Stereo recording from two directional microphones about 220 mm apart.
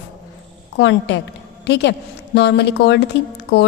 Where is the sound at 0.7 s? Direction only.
50° left (ahead or behind).